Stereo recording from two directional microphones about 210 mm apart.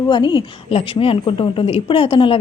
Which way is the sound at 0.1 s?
20° left (ahead or behind).